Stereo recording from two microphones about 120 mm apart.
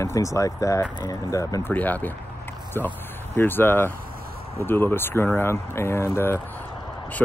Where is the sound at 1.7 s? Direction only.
15° left (ahead or behind).